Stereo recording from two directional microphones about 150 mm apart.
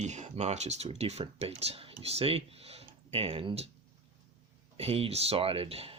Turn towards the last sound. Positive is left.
turn(degrees=-40)  # may be behind; listen again after turning